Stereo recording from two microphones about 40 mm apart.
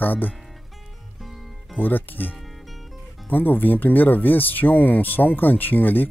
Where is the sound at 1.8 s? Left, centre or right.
Left.